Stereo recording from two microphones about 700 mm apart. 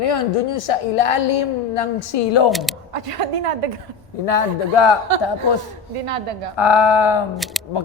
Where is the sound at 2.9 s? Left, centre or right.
Right.